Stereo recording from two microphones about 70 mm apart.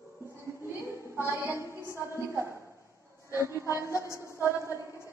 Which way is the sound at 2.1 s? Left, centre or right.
Right.